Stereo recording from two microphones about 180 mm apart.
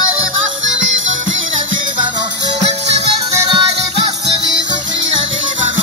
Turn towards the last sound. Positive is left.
turn(degrees=-30)  # may be behind; listen again after turning